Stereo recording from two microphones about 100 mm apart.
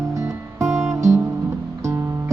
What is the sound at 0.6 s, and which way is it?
Music, 30° right (ahead or behind).